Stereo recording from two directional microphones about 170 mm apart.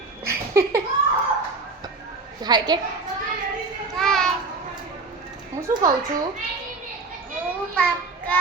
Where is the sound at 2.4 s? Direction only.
25° right (ahead or behind).